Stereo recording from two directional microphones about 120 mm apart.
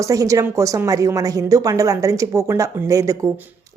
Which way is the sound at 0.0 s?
25° right (ahead or behind).